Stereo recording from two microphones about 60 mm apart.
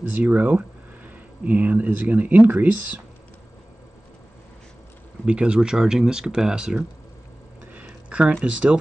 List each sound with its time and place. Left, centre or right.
0.1 s speech: right
5.2 s speech: centre
7.7 s a sound: right